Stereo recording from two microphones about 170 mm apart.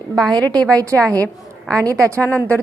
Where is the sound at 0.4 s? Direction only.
5° left (ahead or behind).